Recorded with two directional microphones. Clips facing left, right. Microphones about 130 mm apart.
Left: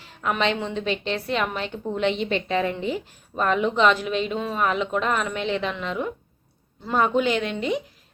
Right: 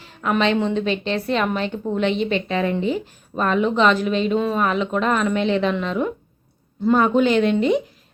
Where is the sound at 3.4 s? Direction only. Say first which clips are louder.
Right 2 dB; 15° left (ahead or behind).